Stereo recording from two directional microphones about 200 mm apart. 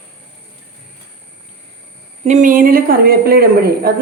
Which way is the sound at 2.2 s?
35° right (ahead or behind).